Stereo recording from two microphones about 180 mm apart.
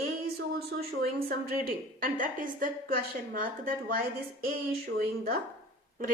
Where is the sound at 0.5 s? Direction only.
60° right (ahead or behind).